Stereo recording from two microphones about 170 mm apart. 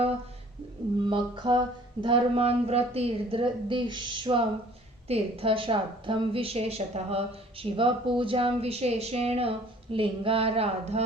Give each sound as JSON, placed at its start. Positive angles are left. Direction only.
{"t": 1.1, "sound": "a woman's voice", "side_deg": -25}